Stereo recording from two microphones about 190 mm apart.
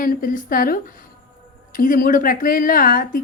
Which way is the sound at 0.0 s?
45° left (ahead or behind).